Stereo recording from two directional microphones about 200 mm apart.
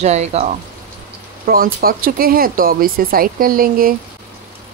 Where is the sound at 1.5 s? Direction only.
45° right (ahead or behind).